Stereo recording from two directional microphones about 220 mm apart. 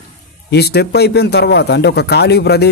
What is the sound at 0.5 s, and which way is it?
Speech, 45° left (ahead or behind).